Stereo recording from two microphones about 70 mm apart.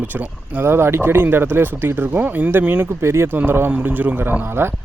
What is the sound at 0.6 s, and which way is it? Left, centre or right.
Speech, right.